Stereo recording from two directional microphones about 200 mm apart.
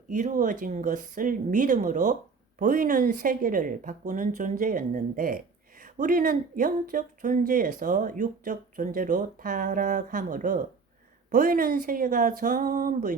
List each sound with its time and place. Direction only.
0.1 s speech: 40° right (ahead or behind)